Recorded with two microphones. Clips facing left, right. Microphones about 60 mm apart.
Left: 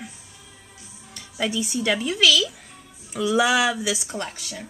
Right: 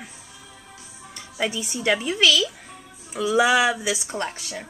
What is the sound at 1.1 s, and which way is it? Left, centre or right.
Music, centre.